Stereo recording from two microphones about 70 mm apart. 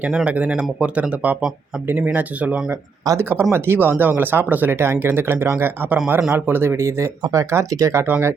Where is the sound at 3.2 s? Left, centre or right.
Right.